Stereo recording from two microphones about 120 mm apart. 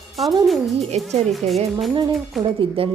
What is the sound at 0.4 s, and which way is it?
Speech, centre (ahead or behind).